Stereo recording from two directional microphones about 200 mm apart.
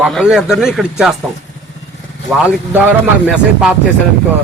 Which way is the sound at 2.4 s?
5° right (ahead or behind).